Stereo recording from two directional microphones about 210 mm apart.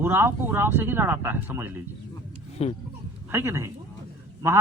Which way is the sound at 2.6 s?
30° left (ahead or behind).